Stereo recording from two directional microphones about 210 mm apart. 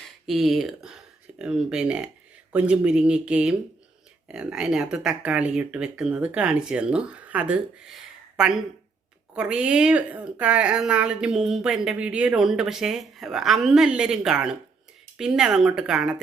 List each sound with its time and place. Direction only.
0.3 s a woman's voice: centre (ahead or behind)